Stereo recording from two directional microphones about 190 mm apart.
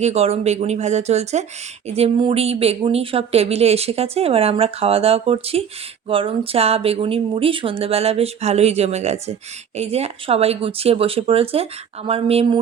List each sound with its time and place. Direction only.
0.0 s speech: 35° right (ahead or behind)